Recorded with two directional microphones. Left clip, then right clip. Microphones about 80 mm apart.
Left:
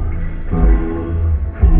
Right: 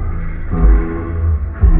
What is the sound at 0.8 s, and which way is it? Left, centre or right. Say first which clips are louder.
Music: left 1 dB; right.